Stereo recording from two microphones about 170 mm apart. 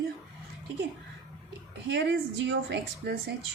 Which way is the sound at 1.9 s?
90° right.